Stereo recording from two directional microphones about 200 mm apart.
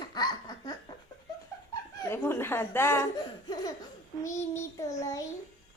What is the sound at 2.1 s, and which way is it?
Laughter, 10° left (ahead or behind).